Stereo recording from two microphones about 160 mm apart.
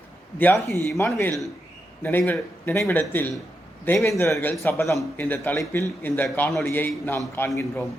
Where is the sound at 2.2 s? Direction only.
10° left (ahead or behind).